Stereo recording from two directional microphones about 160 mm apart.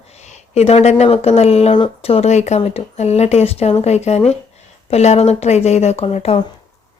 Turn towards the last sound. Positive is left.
turn(degrees=40)  # may be behind; listen again after turning